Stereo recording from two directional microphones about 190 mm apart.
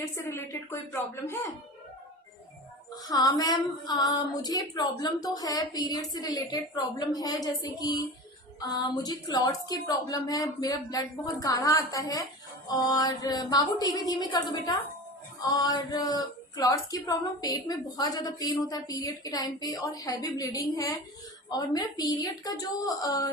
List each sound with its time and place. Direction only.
0.2 s a woman's voice: 15° left (ahead or behind)
2.9 s child singing: 20° left (ahead or behind)